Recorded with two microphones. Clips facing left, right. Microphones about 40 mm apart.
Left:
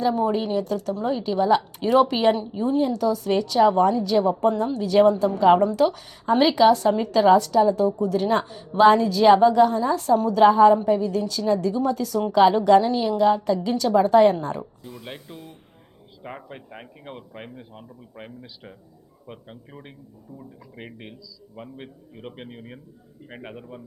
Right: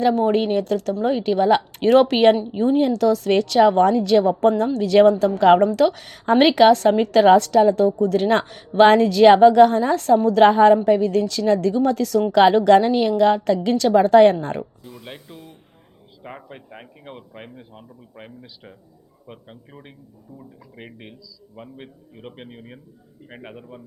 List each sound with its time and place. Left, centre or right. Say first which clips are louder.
0.0 s speech: right 4 dB; right
2.5 s speech: right 4 dB; right
14.4 s speech: right 2 dB; right
14.8 s a man's voice: even; centre